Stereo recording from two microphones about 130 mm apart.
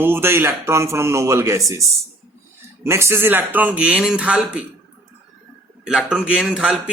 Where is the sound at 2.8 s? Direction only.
20° right (ahead or behind).